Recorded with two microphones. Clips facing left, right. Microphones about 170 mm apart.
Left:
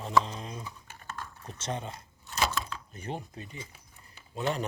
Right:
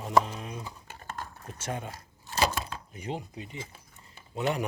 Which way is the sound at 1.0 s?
45° right (ahead or behind).